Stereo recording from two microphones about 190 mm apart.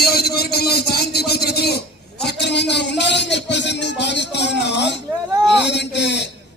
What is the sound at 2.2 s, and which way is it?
Music, 65° left (ahead or behind).